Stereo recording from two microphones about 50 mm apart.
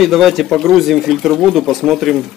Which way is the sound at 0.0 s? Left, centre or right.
Centre.